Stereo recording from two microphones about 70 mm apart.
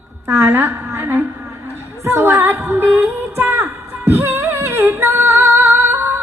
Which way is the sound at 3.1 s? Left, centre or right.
Right.